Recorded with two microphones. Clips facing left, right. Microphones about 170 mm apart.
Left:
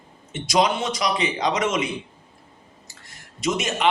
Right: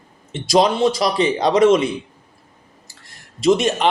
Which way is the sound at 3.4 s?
35° right (ahead or behind).